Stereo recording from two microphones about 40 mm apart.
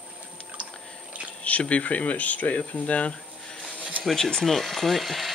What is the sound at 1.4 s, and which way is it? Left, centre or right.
Speech, left.